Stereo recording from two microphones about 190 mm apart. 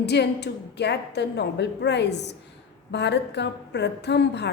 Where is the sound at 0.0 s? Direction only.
60° left (ahead or behind).